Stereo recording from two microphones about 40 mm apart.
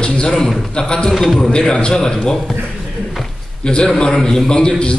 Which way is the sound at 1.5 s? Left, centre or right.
Left.